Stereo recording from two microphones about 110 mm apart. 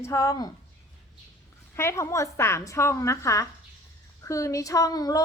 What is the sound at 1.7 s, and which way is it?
A woman's voice, 25° left (ahead or behind).